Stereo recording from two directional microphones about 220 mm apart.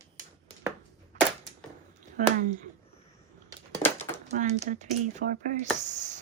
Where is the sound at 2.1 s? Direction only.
35° right (ahead or behind).